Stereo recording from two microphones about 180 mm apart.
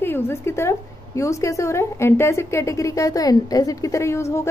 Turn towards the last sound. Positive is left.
turn(degrees=15)  # may be behind; listen again after turning